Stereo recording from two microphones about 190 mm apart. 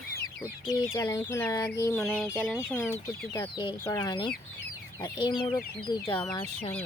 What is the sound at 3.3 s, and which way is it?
Speech, 25° left (ahead or behind).